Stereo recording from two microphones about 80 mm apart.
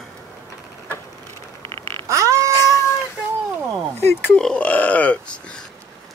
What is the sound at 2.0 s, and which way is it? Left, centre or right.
Cat, right.